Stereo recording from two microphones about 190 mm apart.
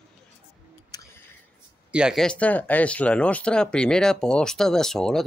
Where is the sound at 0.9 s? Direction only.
20° left (ahead or behind).